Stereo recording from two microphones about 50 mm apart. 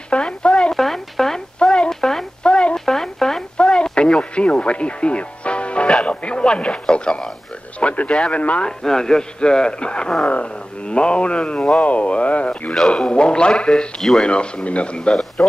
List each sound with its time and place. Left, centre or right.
0.1 s a sound: centre
0.7 s a sound: centre
2.8 s radio: centre; by 5.9 s left
6.0 s speech: left
8.6 s speech: centre
12.7 s speech: centre